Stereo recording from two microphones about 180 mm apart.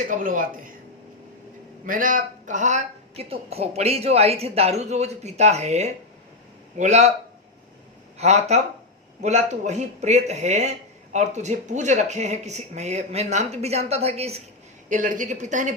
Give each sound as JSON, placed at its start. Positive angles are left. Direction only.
{"t": 0.1, "sound": "speech", "side_deg": -50}
{"t": 1.9, "sound": "a woman's voice", "side_deg": -45}
{"t": 8.2, "sound": "a woman's voice", "side_deg": -40}
{"t": 14.8, "sound": "speech", "side_deg": -45}